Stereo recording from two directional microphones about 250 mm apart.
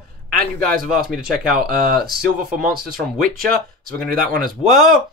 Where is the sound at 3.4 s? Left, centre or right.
Right.